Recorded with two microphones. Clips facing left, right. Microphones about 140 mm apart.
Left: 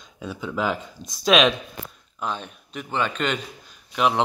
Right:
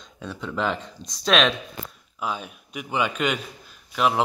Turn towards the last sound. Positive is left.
turn(degrees=0)  # may be behind; listen again after turning